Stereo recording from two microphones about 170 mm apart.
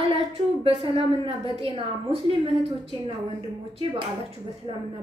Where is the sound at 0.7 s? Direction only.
35° right (ahead or behind).